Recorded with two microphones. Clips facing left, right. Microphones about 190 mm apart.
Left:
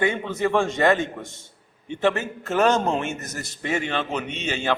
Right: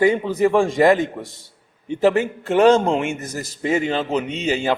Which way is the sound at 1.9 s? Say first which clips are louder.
Right 6 dB; 35° right (ahead or behind).